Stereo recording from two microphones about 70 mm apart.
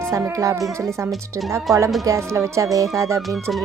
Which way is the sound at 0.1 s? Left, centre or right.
Right.